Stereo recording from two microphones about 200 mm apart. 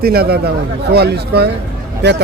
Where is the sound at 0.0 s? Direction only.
50° right (ahead or behind).